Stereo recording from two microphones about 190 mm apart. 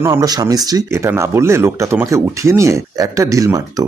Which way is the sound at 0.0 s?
15° right (ahead or behind).